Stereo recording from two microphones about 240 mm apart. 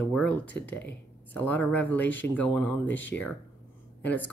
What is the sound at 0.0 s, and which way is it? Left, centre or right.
Speech, centre.